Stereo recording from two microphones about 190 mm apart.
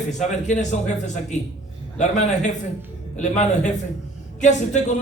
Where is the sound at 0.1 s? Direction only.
40° left (ahead or behind).